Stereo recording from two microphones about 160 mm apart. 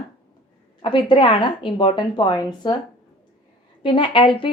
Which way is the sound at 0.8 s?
30° left (ahead or behind).